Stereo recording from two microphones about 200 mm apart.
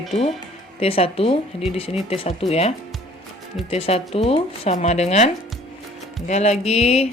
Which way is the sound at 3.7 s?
30° left (ahead or behind).